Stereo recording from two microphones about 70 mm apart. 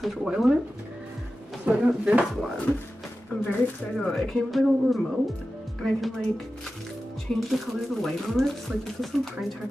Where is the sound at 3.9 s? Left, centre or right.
Centre.